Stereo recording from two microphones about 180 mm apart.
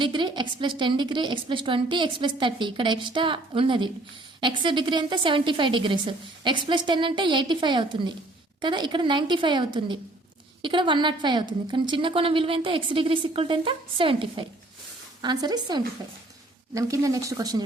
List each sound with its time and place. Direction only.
0.0 s a woman's voice: 25° right (ahead or behind)